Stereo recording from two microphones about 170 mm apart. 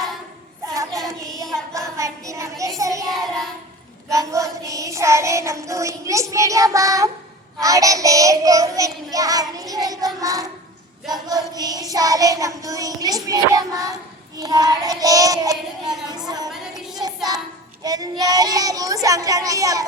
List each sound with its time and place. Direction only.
2.0 s child singing: 20° right (ahead or behind)
3.1 s child singing: centre (ahead or behind)
4.1 s child singing: 20° right (ahead or behind)
16.0 s a woman's voice: 25° right (ahead or behind)
16.5 s music: centre (ahead or behind)
17.8 s child singing: 20° right (ahead or behind)